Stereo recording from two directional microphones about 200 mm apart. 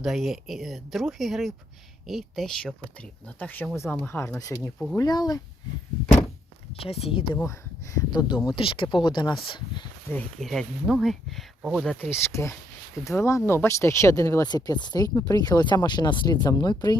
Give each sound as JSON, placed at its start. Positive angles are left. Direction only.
{"t": 0.0, "sound": "speech", "side_deg": 0}
{"t": 6.7, "sound": "speech", "side_deg": 30}
{"t": 7.3, "sound": "speech", "side_deg": 15}
{"t": 10.1, "sound": "speech", "side_deg": 5}